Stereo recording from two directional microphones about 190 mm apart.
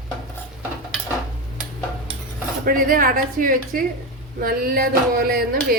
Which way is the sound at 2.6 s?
50° right (ahead or behind).